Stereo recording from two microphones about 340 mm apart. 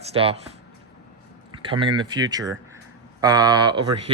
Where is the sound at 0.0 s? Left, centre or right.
Centre.